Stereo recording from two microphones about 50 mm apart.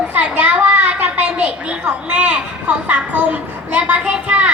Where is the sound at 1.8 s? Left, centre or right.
Right.